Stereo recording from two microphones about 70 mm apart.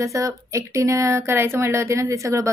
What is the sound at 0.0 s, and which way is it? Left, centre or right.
A woman's voice, right.